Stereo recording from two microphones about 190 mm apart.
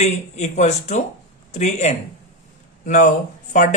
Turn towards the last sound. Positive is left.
turn(degrees=40)  # may be behind; listen again after turning